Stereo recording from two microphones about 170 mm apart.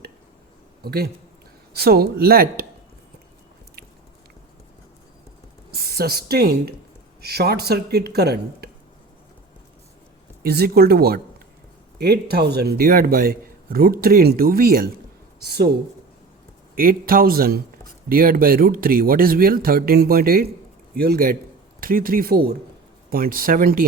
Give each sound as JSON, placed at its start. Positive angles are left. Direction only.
{"t": 0.9, "sound": "a man's voice", "side_deg": -70}
{"t": 5.7, "sound": "speech", "side_deg": -65}
{"t": 10.4, "sound": "a man's voice", "side_deg": -65}
{"t": 15.4, "sound": "speech", "side_deg": -70}
{"t": 16.7, "sound": "a man's voice", "side_deg": -60}